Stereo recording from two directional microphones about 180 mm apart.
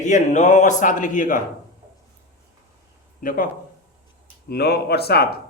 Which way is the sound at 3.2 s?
50° left (ahead or behind).